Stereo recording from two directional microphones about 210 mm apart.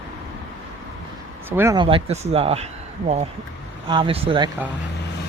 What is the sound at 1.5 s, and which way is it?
Speech, 10° right (ahead or behind).